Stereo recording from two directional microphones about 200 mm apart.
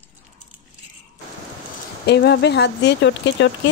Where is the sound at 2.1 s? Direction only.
55° left (ahead or behind).